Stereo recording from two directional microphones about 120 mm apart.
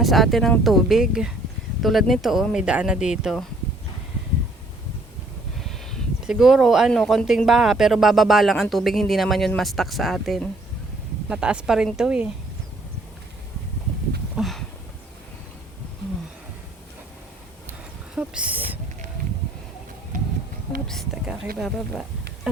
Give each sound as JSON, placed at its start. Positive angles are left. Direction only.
{"t": 0.0, "sound": "speech", "side_deg": 0}
{"t": 5.5, "sound": "a sound", "side_deg": 0}
{"t": 6.3, "sound": "speech", "side_deg": -5}
{"t": 14.3, "sound": "a sound", "side_deg": 0}
{"t": 18.1, "sound": "speech", "side_deg": -5}
{"t": 20.8, "sound": "speech", "side_deg": 0}